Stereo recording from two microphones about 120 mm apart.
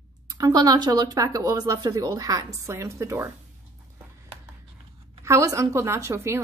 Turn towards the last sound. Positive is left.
turn(degrees=-20)  # may be behind; listen again after turning